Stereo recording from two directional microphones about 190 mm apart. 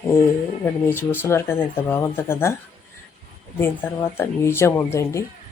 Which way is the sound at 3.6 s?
10° left (ahead or behind).